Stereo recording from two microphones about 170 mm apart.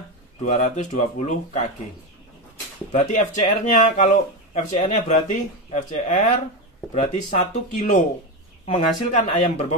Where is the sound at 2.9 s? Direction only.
45° left (ahead or behind).